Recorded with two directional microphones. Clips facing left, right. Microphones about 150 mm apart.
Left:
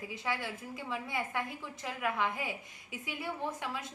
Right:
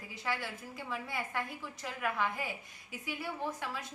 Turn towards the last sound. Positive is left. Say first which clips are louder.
# left 1 dB
turn(degrees=20)  # may be behind; listen again after turning